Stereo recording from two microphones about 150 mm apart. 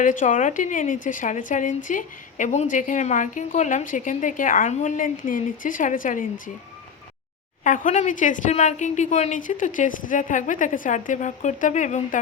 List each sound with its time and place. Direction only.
0.0 s a woman's voice: 60° left (ahead or behind)
7.6 s a woman's voice: 60° left (ahead or behind)